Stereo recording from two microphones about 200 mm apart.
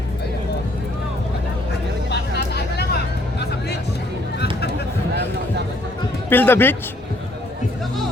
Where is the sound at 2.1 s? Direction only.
55° left (ahead or behind).